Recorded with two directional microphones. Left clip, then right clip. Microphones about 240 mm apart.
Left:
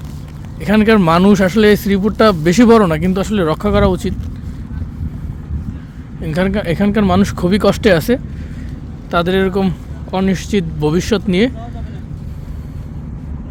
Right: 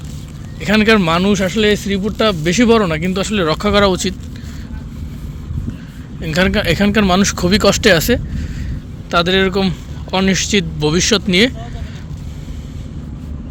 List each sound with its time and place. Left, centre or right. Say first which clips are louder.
0.6 s speech: even; centre
6.2 s a man's voice: right 2 dB; centre